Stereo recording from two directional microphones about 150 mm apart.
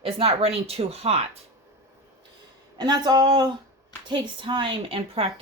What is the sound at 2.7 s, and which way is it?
Speech, 25° right (ahead or behind).